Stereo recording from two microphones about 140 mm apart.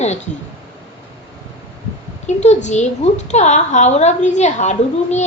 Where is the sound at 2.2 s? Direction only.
55° left (ahead or behind).